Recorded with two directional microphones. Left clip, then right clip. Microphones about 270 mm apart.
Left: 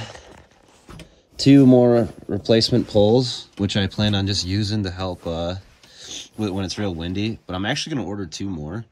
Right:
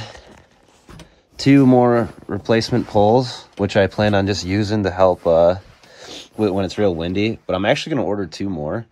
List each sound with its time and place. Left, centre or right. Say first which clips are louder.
0.9 s speech: left 2 dB; centre
6.0 s a sound: right 7 dB; centre
6.8 s speech: right 8 dB; centre